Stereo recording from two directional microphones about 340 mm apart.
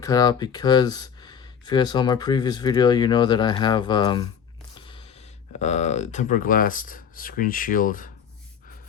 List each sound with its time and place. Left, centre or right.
0.0 s speech: centre
5.5 s speech: centre